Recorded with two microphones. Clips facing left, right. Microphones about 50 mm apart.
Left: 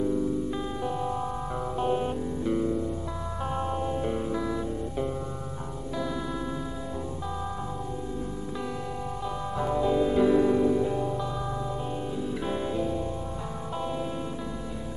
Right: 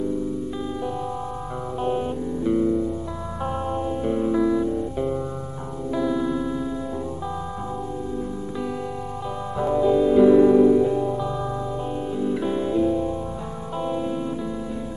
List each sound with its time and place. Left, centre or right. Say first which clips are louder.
1.8 s music: right 3 dB; centre
9.6 s music: right 6 dB; centre
12.4 s music: right 7 dB; centre